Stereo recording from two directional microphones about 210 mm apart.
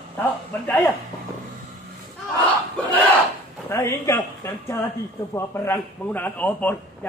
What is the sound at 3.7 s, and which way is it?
Speech, 10° left (ahead or behind).